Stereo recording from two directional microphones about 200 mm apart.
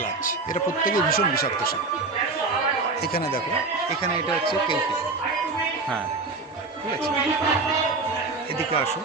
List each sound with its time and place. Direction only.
0.9 s speech: 45° left (ahead or behind)